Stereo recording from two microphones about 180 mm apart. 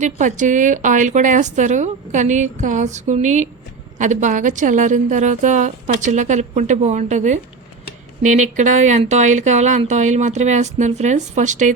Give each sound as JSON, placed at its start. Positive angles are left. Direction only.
{"t": 0.0, "sound": "speech", "side_deg": -45}